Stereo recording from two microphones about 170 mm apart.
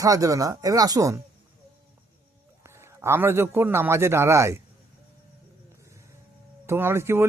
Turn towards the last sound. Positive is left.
turn(degrees=-15)  # may be behind; listen again after turning